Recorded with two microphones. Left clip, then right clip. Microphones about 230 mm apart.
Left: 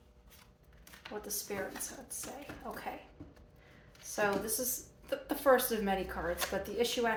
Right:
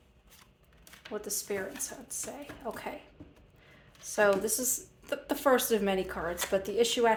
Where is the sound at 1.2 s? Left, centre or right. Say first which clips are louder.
Right 4 dB; right.